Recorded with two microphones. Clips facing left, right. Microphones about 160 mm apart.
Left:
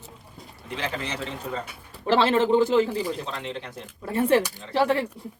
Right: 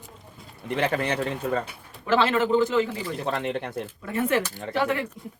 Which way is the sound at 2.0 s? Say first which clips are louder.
Left 2 dB; 30° left (ahead or behind).